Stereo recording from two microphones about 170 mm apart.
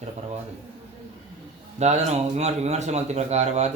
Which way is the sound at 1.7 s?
40° right (ahead or behind).